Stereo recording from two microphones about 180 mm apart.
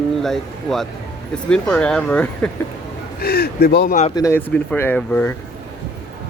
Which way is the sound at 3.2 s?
60° left (ahead or behind).